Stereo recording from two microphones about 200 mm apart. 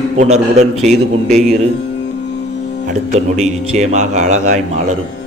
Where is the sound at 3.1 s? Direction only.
35° right (ahead or behind).